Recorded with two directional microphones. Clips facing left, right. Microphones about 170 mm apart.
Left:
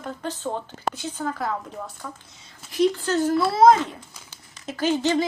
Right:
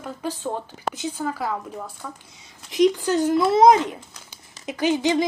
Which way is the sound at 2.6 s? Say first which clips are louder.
Right 3 dB; 15° right (ahead or behind).